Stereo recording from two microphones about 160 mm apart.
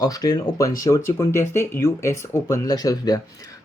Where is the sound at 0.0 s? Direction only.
25° left (ahead or behind).